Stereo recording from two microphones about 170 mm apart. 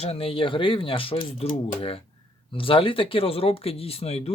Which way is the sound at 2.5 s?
30° left (ahead or behind).